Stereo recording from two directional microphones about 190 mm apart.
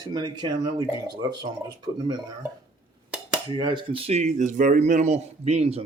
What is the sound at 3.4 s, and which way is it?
Speech, 25° right (ahead or behind).